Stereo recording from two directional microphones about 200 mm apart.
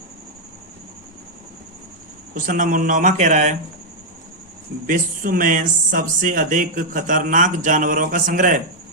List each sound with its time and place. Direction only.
2.3 s speech: 40° right (ahead or behind)
4.9 s speech: 45° right (ahead or behind)